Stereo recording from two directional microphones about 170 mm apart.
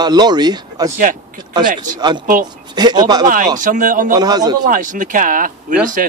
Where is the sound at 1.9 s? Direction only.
25° right (ahead or behind).